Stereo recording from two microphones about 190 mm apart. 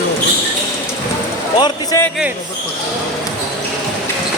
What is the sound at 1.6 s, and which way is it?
Speech, 15° left (ahead or behind).